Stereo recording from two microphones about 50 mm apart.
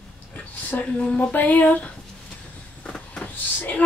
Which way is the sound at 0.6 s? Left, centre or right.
Left.